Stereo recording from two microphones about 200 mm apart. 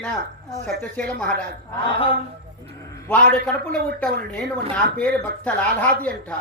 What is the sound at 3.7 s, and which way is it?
Speech, 5° left (ahead or behind).